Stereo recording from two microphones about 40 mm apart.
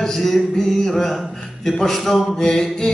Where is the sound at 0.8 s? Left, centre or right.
Centre.